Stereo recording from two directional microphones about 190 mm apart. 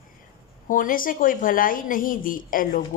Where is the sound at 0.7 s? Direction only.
45° left (ahead or behind).